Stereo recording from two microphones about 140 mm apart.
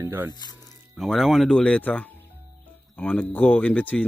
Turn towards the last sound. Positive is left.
turn(degrees=10)  # may be behind; listen again after turning